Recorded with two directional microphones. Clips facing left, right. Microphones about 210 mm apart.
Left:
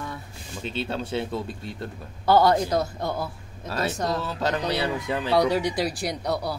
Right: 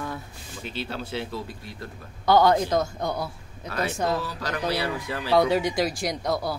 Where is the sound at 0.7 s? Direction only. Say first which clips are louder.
Left 4 dB; 25° left (ahead or behind).